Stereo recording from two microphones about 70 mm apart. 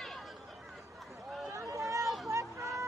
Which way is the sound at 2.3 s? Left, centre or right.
Right.